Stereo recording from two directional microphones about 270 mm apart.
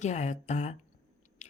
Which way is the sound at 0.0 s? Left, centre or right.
Left.